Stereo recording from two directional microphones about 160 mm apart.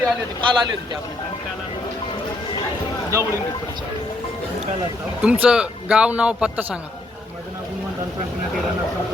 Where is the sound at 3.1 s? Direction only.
20° right (ahead or behind).